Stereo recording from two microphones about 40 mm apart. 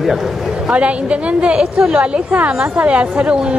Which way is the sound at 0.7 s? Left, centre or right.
Right.